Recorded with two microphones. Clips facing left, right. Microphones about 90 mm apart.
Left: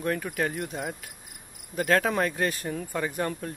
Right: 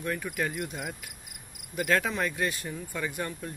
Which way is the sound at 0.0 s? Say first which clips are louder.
Left 3 dB; 40° left (ahead or behind).